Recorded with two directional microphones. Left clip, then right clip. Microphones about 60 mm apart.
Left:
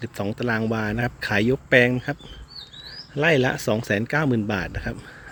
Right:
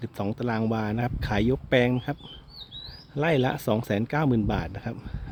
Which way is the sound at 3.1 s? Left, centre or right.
Right.